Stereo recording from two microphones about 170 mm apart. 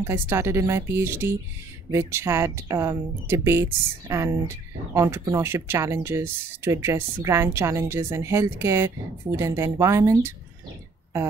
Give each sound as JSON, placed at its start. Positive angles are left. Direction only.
{"t": 0.0, "sound": "speech", "side_deg": -15}